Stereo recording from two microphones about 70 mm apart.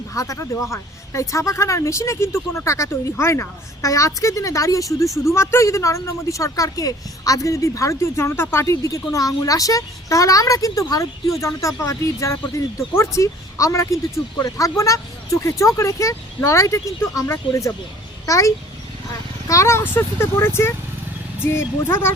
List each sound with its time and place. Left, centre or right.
0.1 s speech: left
8.6 s a child's voice: left